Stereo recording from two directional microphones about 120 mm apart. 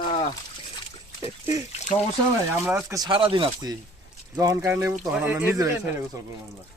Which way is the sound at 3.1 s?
45° right (ahead or behind).